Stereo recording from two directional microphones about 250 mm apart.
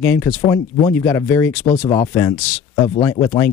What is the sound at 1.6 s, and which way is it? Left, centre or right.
Speech, left.